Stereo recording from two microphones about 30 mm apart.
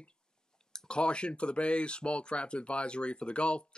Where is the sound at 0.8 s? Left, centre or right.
Left.